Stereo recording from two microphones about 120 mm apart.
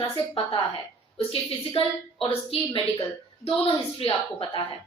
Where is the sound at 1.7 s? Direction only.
55° left (ahead or behind).